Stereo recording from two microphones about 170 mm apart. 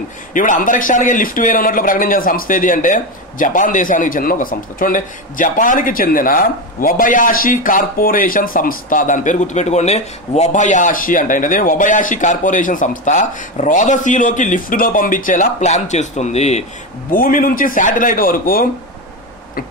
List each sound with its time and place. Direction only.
0.3 s speech: 50° left (ahead or behind)
17.1 s a man's voice: 55° left (ahead or behind)